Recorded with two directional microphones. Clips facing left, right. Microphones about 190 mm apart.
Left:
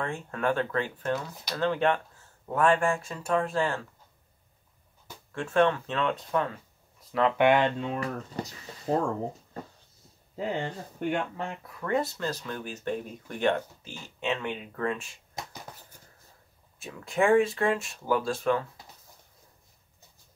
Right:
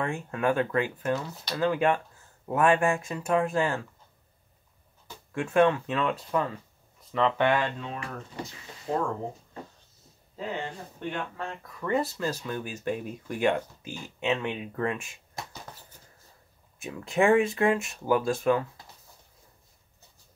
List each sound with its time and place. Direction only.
0.0 s speech: 15° right (ahead or behind)
5.3 s speech: 15° right (ahead or behind); by 7.4 s 5° left (ahead or behind)
7.4 s speech: 20° left (ahead or behind)
7.9 s speech: 40° left (ahead or behind)
11.1 s speech: 20° left (ahead or behind)
11.8 s speech: 5° right (ahead or behind)
16.8 s speech: 20° right (ahead or behind)